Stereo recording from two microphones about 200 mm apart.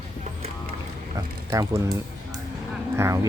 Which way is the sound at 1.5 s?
15° right (ahead or behind).